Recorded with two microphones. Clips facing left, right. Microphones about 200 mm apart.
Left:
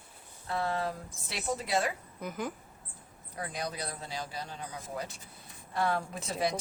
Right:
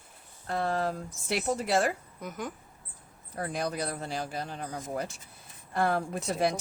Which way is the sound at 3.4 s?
50° right (ahead or behind).